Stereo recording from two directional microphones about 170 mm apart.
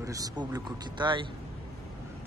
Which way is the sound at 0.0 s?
20° right (ahead or behind).